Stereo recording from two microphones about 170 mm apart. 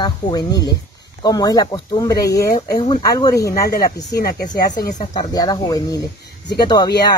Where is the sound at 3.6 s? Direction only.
65° left (ahead or behind).